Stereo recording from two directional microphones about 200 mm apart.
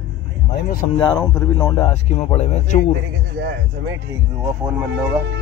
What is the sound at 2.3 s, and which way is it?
Speech, 35° left (ahead or behind).